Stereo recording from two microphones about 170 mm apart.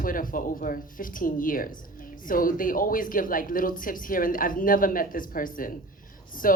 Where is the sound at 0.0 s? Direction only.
55° left (ahead or behind).